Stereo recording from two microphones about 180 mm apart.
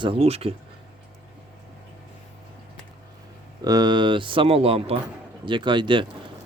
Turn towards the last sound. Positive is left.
turn(degrees=-25)  # may be behind; listen again after turning